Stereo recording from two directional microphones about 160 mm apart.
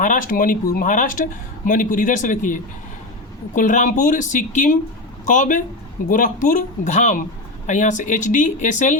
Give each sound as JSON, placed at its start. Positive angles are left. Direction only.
{"t": 0.0, "sound": "speech", "side_deg": 55}